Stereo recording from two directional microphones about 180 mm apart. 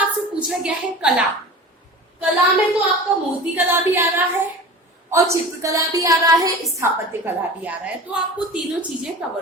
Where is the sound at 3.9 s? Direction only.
10° right (ahead or behind).